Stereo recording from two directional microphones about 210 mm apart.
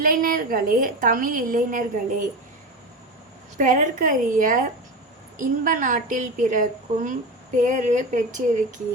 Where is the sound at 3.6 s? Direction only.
40° right (ahead or behind).